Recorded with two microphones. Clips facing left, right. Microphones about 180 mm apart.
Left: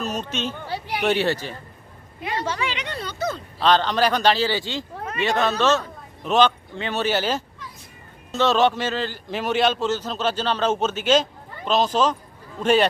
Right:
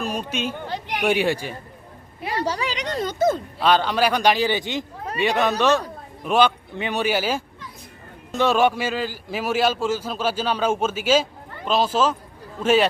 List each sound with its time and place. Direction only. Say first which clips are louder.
0.0 s speech: right 1 dB; 10° right (ahead or behind)
0.7 s a sound: even; 10° left (ahead or behind)
1.0 s a man's voice: right 1 dB; 10° right (ahead or behind)
2.2 s speech: right 2 dB; 35° right (ahead or behind)
3.6 s a man's voice: left 1 dB; 10° right (ahead or behind)